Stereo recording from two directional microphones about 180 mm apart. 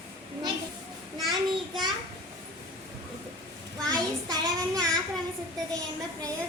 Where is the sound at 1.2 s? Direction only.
Centre (ahead or behind).